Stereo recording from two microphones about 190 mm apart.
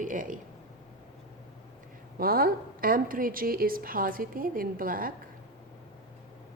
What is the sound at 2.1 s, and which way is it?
Speech, 50° right (ahead or behind).